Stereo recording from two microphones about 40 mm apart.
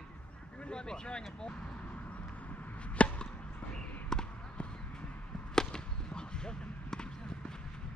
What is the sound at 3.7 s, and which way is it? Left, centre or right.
Basketball bounce, centre.